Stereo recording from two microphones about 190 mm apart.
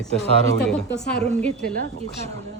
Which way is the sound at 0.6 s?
5° left (ahead or behind).